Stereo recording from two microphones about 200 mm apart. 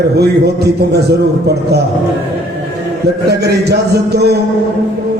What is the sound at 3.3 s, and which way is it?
A man's voice, 55° right (ahead or behind).